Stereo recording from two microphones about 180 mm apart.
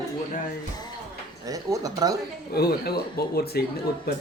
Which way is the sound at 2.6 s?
60° left (ahead or behind).